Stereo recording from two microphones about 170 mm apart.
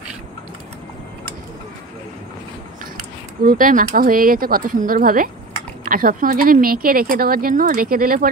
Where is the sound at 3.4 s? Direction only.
55° right (ahead or behind).